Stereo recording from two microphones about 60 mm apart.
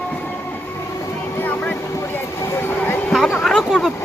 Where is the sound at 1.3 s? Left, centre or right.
Left.